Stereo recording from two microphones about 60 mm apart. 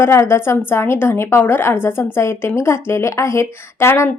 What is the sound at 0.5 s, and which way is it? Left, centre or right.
Speech, left.